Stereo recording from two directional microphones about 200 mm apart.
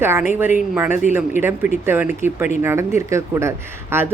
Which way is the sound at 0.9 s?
35° left (ahead or behind).